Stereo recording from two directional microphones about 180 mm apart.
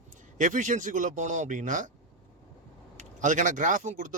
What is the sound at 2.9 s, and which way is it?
Speech, 45° right (ahead or behind).